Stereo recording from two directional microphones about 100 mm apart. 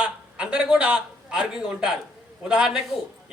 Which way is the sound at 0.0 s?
10° right (ahead or behind).